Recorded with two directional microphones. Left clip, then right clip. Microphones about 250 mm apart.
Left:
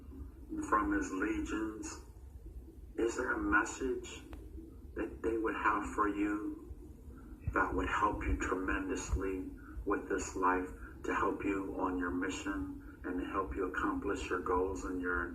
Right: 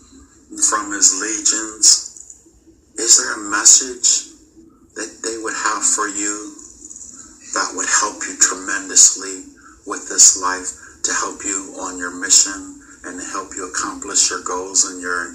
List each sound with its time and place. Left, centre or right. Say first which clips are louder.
0.5 s a man's voice: right 12 dB; right
2.9 s a sound: right 17 dB; right
4.9 s music: right 10 dB; right
7.5 s a man's voice: right 14 dB; right